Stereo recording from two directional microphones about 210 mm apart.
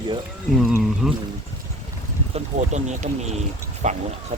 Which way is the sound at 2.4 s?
35° right (ahead or behind).